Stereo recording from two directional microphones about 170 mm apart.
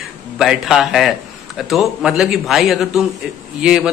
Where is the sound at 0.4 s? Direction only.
Centre (ahead or behind).